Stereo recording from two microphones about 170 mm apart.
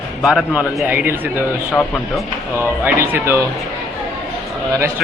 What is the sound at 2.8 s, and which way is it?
Speech, 15° right (ahead or behind).